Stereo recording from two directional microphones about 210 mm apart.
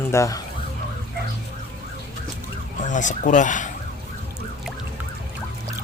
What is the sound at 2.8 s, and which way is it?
Speech, 35° left (ahead or behind).